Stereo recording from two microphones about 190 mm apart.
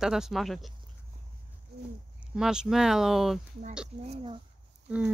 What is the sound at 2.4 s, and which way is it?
Speech, 5° right (ahead or behind).